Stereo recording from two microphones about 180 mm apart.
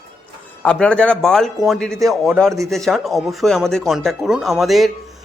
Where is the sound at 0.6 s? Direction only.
5° left (ahead or behind).